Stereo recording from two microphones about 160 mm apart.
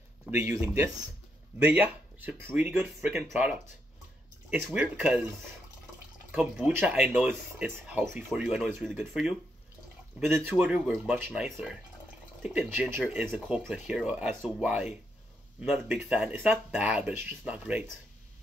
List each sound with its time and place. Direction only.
0.5 s speech: 20° right (ahead or behind)
6.3 s speech: 5° right (ahead or behind)
10.5 s speech: 5° right (ahead or behind)